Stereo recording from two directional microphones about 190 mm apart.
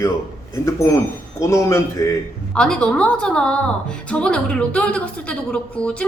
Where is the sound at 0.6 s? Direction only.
15° left (ahead or behind).